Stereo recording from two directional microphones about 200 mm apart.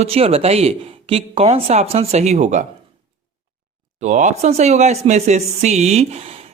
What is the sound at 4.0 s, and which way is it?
Speech, 35° right (ahead or behind).